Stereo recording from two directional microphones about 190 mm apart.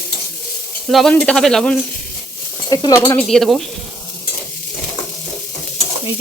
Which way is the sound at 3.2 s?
Centre (ahead or behind).